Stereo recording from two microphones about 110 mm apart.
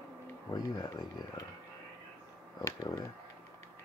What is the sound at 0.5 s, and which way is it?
Speech, 35° left (ahead or behind).